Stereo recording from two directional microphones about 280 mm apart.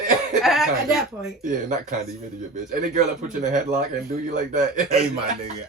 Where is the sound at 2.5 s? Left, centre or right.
Right.